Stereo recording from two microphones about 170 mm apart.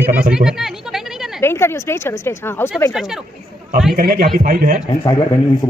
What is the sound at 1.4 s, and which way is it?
A woman's voice, 15° left (ahead or behind).